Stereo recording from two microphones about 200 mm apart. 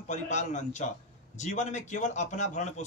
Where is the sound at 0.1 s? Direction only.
35° left (ahead or behind).